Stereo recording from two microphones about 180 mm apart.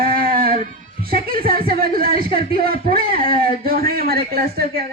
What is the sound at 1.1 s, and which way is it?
Speech, 55° right (ahead or behind).